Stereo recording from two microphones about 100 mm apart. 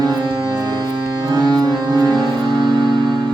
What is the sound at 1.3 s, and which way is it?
Music, 45° right (ahead or behind).